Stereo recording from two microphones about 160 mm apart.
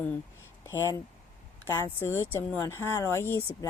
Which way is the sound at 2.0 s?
15° left (ahead or behind).